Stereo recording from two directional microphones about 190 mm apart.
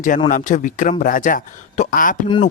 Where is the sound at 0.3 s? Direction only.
45° left (ahead or behind).